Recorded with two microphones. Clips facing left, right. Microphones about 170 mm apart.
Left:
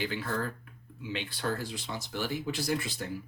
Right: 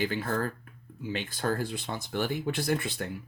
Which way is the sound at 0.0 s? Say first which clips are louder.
Right 3 dB; 45° right (ahead or behind).